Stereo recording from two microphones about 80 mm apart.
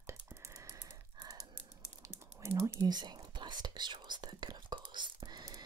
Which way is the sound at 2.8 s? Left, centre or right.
Right.